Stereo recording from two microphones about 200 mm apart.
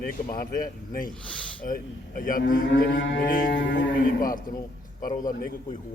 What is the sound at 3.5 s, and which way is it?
Speech, 65° left (ahead or behind).